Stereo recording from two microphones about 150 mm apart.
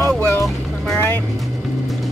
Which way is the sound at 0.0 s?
20° left (ahead or behind).